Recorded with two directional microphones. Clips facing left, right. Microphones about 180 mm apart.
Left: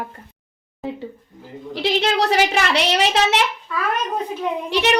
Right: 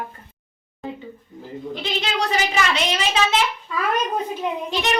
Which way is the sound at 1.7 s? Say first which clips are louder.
Left 7 dB; 75° left (ahead or behind).